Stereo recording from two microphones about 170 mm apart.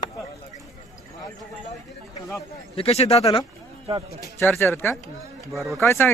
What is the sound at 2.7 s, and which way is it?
Speech, 35° left (ahead or behind).